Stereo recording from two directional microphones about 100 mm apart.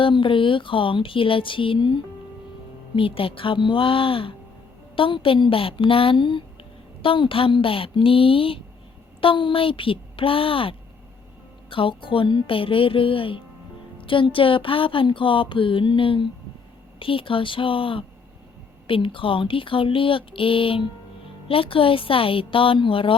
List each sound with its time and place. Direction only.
0.0 s speech: 60° left (ahead or behind)